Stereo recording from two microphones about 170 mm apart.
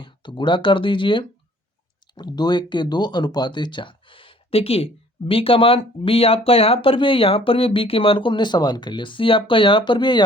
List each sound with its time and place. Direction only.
0.0 s speech: 30° left (ahead or behind)